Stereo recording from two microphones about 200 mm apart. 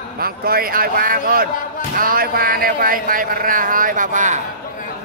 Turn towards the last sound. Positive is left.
turn(degrees=-40)  # may be behind; listen again after turning